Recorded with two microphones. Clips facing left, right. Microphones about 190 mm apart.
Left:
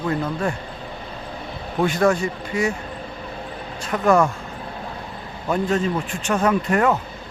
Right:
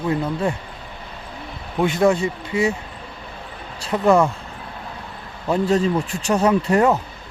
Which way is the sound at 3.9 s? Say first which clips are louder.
Right 2 dB; 25° right (ahead or behind).